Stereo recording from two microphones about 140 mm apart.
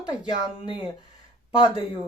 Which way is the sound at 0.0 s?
30° left (ahead or behind).